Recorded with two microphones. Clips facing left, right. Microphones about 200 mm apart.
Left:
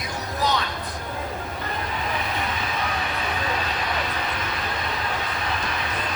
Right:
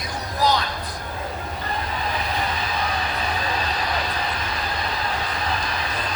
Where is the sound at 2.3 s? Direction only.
35° right (ahead or behind).